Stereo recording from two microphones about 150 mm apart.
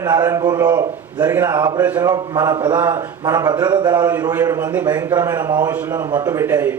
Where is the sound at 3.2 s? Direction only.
25° right (ahead or behind).